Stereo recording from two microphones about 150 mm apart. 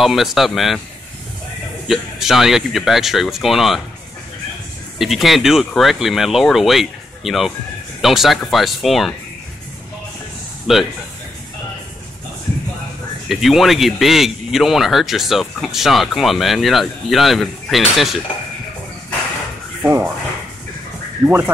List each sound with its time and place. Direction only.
0.0 s speech: centre (ahead or behind)
1.9 s speech: centre (ahead or behind)
4.9 s speech: centre (ahead or behind)
10.7 s speech: centre (ahead or behind)
13.3 s speech: centre (ahead or behind)
19.8 s speech: 15° right (ahead or behind)
21.2 s speech: 15° right (ahead or behind)